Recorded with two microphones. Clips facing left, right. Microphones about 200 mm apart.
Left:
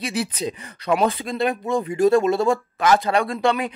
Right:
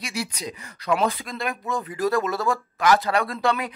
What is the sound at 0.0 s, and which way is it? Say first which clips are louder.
Speech: left 6 dB; 25° left (ahead or behind).